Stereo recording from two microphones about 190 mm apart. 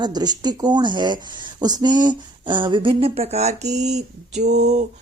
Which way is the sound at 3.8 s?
35° right (ahead or behind).